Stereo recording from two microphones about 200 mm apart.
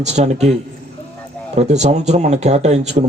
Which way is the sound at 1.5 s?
35° right (ahead or behind).